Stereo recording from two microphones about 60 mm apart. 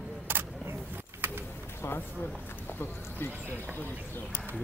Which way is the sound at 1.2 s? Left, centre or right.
Right.